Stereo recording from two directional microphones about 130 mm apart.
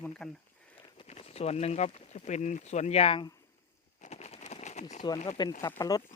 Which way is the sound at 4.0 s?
60° left (ahead or behind).